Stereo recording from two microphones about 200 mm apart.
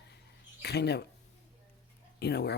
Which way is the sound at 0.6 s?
55° left (ahead or behind).